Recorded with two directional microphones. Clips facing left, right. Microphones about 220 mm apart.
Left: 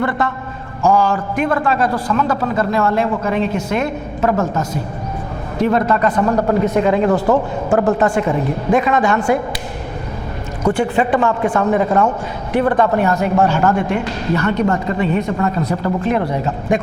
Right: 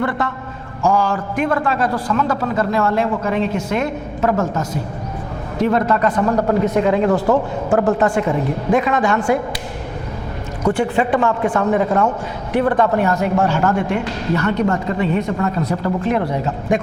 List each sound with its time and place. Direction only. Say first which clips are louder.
0.0 s a man's voice: left 2 dB; 20° left (ahead or behind)
10.8 s a man's voice: left 1 dB; 20° left (ahead or behind)